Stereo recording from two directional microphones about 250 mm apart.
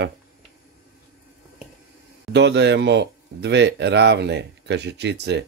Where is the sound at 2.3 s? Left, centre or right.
Right.